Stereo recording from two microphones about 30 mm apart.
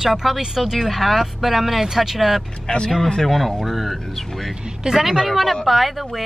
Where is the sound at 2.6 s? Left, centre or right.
Left.